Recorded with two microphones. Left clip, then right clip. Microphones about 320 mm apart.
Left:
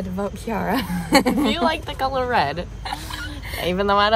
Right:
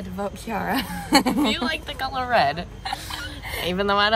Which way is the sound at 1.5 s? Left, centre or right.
Centre.